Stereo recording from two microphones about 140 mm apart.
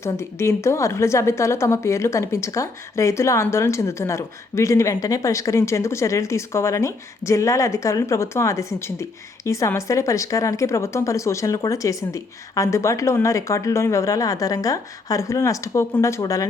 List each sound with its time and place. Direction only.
0.0 s a woman's voice: 20° left (ahead or behind)